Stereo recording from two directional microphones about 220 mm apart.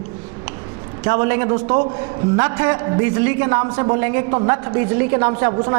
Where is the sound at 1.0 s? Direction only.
15° right (ahead or behind).